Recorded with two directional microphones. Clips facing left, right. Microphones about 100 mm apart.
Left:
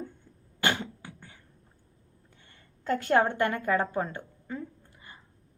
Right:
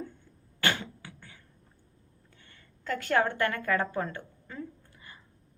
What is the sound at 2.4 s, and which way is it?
A woman's voice, 25° left (ahead or behind).